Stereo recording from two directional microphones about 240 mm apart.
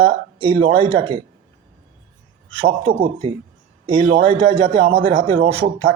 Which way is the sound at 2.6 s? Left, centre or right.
Right.